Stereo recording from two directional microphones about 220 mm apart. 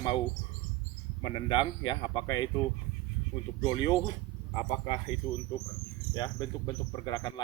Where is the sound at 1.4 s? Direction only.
20° left (ahead or behind).